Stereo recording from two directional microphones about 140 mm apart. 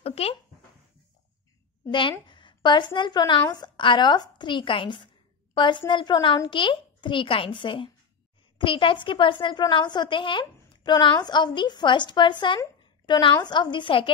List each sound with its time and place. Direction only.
0.0 s speech: 45° left (ahead or behind)
1.9 s a woman's voice: 35° left (ahead or behind)